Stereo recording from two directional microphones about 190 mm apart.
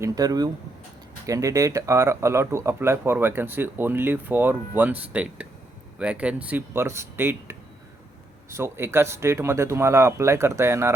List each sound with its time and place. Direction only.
0.0 s speech: 20° right (ahead or behind)
8.5 s speech: 15° right (ahead or behind)